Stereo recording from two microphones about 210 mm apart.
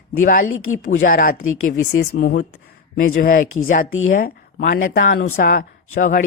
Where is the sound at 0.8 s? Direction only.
40° left (ahead or behind).